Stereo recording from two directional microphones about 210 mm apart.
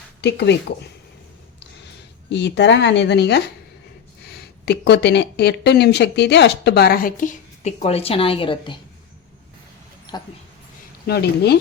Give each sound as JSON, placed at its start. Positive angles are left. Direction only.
{"t": 0.2, "sound": "speech", "side_deg": 55}
{"t": 2.3, "sound": "speech", "side_deg": 55}
{"t": 11.0, "sound": "speech", "side_deg": 50}